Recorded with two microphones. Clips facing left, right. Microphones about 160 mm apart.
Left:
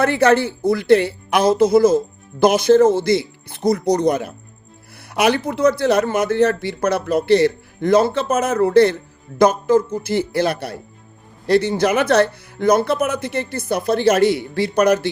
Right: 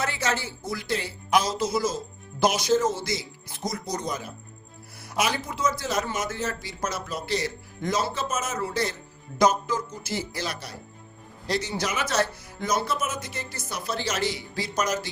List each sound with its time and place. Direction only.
0.0 s speech: 60° left (ahead or behind)